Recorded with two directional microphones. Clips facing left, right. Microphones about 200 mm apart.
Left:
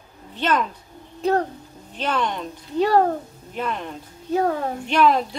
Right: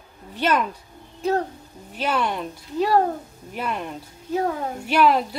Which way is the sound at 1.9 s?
10° right (ahead or behind).